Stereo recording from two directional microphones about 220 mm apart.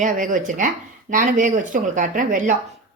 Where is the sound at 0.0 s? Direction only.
35° right (ahead or behind).